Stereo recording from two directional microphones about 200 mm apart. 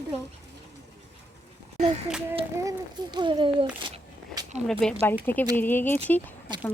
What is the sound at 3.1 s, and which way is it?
Speech, 25° right (ahead or behind).